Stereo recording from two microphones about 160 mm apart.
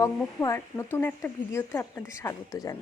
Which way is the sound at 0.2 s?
15° left (ahead or behind).